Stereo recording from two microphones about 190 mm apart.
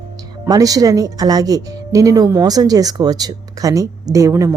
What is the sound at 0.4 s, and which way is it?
Speech, 20° right (ahead or behind).